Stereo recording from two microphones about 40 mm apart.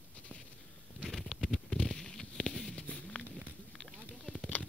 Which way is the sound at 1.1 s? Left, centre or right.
Centre.